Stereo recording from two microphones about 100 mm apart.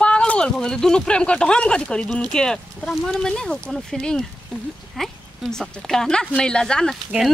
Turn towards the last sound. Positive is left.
turn(degrees=5)  # may be behind; listen again after turning